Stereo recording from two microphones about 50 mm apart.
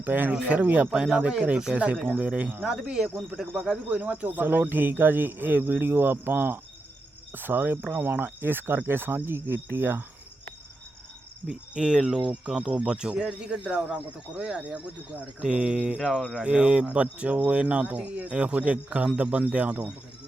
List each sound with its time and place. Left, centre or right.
0.0 s speech: right
0.9 s speech: centre
3.7 s speech: right
4.3 s speech: right
11.4 s speech: centre
16.0 s a sound: centre
16.4 s speech: right